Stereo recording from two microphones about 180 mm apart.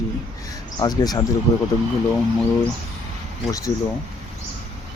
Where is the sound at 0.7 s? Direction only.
20° left (ahead or behind).